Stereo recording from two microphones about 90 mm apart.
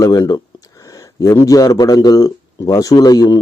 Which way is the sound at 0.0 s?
45° left (ahead or behind).